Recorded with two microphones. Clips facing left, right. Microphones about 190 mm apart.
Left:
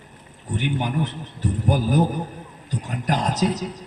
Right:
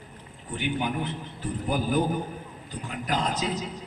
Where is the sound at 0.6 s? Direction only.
45° left (ahead or behind).